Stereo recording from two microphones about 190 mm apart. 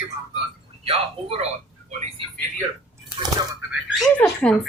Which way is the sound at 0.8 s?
30° right (ahead or behind).